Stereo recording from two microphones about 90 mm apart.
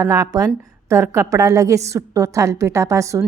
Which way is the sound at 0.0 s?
40° right (ahead or behind).